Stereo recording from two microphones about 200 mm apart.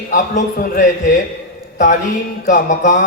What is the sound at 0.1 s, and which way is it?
A man's voice, 40° left (ahead or behind).